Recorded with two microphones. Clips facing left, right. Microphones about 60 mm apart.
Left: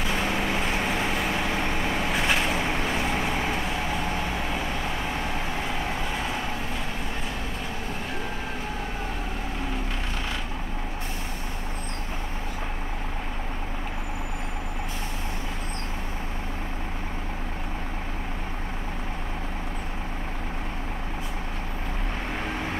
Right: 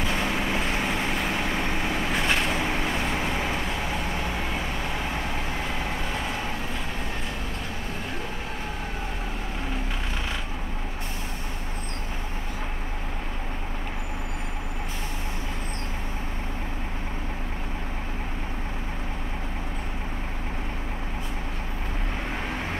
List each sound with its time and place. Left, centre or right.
2.1 s vehicle: centre